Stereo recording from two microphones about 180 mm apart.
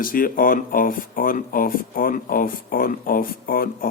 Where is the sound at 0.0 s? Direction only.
50° left (ahead or behind).